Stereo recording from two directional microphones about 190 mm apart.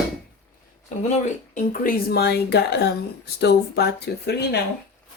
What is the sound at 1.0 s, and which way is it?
Speech, 40° left (ahead or behind).